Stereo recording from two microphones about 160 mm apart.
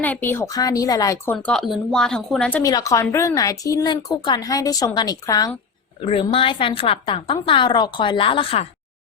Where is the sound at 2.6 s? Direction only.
20° left (ahead or behind).